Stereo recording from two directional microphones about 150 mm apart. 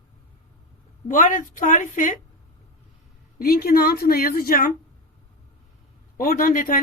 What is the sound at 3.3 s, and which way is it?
A woman's voice, 85° left.